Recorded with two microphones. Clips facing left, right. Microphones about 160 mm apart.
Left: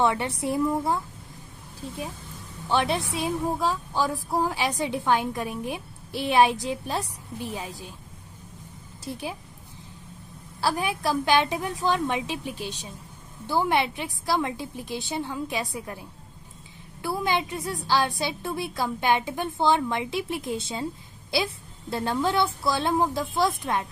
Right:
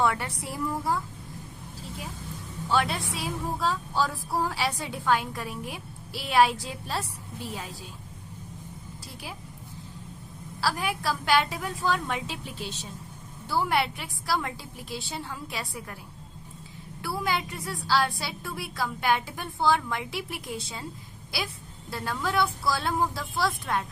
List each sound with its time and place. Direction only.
0.0 s a woman's voice: 20° left (ahead or behind)
2.6 s a woman's voice: 25° left (ahead or behind)
10.6 s a woman's voice: 20° left (ahead or behind)
17.0 s a woman's voice: 20° left (ahead or behind)